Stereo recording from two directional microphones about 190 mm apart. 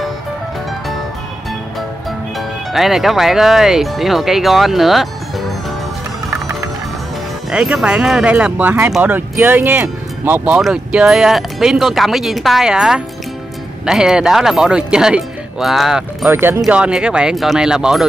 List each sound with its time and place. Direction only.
2.3 s speech: centre (ahead or behind)
7.5 s speech: 5° right (ahead or behind)
16.3 s speech: 10° right (ahead or behind)